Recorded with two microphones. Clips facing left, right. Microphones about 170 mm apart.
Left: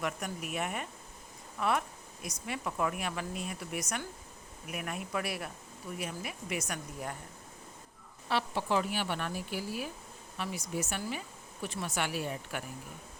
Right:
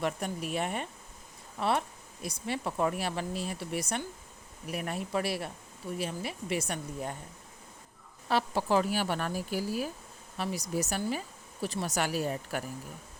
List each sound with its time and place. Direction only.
0.0 s speech: 30° right (ahead or behind)
8.3 s speech: 40° right (ahead or behind)